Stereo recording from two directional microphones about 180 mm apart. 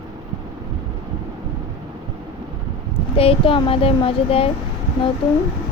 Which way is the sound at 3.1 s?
30° left (ahead or behind).